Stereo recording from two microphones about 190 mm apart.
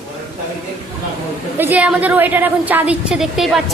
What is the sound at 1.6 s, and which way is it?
A woman's voice, 10° right (ahead or behind).